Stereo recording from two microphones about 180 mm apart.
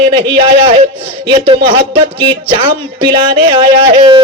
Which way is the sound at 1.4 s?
30° right (ahead or behind).